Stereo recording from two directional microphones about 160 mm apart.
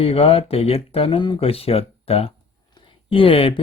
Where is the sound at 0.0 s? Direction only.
35° left (ahead or behind).